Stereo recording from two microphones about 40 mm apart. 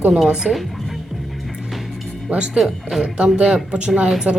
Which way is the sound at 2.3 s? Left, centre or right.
Right.